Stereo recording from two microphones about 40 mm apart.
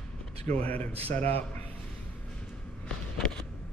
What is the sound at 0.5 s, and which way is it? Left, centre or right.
Speech, left.